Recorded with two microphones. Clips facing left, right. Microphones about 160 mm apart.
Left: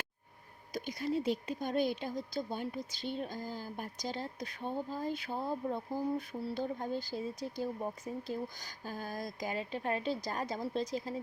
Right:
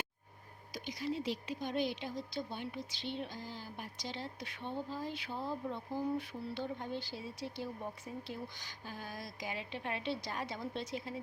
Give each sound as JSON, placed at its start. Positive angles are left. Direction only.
{"t": 0.7, "sound": "speech", "side_deg": 50}